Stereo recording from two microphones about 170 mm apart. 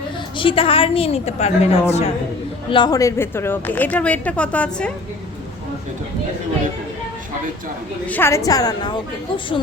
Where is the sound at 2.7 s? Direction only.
25° left (ahead or behind); by 4.9 s 10° left (ahead or behind).